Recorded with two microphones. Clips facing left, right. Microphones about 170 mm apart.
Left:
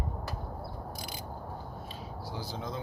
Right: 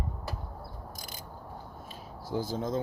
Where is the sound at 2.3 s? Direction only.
45° right (ahead or behind).